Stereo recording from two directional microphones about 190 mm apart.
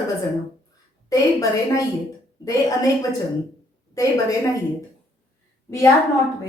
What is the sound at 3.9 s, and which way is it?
Speech, 20° left (ahead or behind).